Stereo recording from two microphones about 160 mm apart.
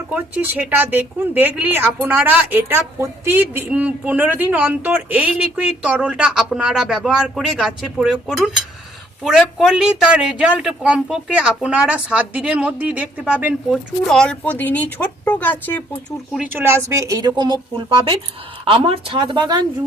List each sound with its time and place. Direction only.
0.1 s a woman's voice: 10° right (ahead or behind); by 16.0 s 10° left (ahead or behind)
16.3 s speech: 10° right (ahead or behind); by 19.6 s 25° right (ahead or behind)